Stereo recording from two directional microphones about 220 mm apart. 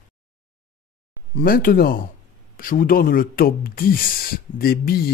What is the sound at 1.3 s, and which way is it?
Speech, 40° left (ahead or behind).